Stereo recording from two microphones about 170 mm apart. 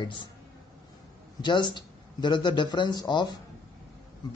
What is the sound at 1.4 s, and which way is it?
A man's voice, 25° left (ahead or behind).